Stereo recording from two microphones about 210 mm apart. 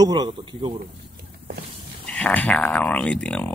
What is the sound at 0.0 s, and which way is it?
Speech, 20° right (ahead or behind).